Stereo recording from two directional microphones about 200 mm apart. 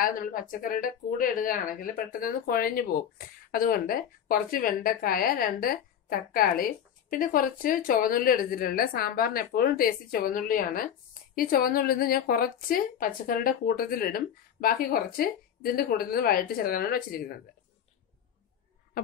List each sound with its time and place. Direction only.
0.0 s speech: 45° left (ahead or behind)